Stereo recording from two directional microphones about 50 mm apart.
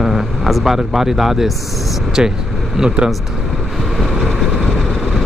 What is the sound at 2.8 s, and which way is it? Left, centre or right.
Speech, centre.